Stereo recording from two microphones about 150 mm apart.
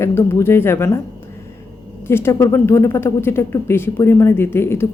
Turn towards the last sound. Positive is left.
turn(degrees=15)  # may be behind; listen again after turning